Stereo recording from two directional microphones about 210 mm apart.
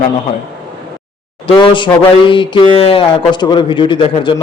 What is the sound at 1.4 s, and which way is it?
A man's voice, 25° left (ahead or behind).